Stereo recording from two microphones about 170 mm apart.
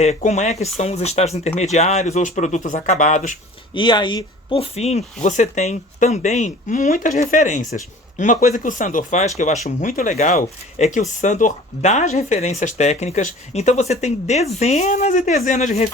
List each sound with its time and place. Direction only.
0.0 s speech: 40° left (ahead or behind)
3.8 s speech: 25° left (ahead or behind); by 15.9 s 45° left (ahead or behind)